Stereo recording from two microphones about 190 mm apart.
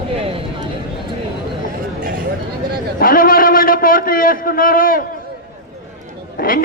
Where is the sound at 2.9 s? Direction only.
45° left (ahead or behind).